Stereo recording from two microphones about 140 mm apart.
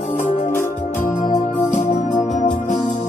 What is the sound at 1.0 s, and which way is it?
Music, 60° left (ahead or behind).